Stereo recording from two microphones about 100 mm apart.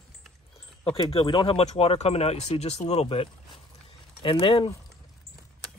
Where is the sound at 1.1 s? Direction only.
55° left (ahead or behind); by 3.6 s 75° left (ahead or behind).